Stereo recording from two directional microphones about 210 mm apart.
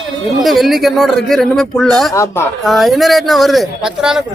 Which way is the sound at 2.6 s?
Centre (ahead or behind).